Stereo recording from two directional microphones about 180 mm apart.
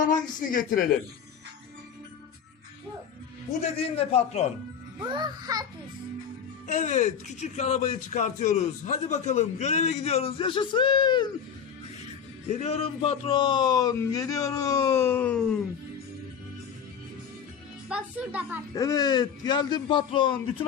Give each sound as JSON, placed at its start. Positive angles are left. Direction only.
{"t": 0.0, "sound": "speech", "side_deg": 50}
{"t": 3.8, "sound": "speech", "side_deg": 35}
{"t": 4.9, "sound": "a child's voice", "side_deg": -25}
{"t": 6.7, "sound": "speech", "side_deg": 45}
{"t": 12.5, "sound": "a man's voice", "side_deg": 40}
{"t": 17.8, "sound": "a woman's voice", "side_deg": -5}
{"t": 18.7, "sound": "a man's voice", "side_deg": 20}